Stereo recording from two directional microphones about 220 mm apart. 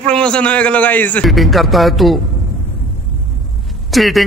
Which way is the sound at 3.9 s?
Centre (ahead or behind).